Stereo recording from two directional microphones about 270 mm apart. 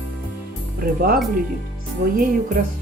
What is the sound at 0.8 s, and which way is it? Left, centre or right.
Speech, right.